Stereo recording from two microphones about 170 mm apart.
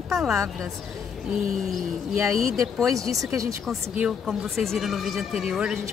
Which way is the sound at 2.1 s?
20° right (ahead or behind).